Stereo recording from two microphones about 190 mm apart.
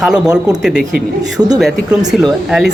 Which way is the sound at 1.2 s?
20° right (ahead or behind).